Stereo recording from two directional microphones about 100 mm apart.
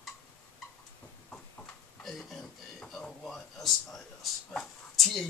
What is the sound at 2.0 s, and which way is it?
Speech, centre (ahead or behind).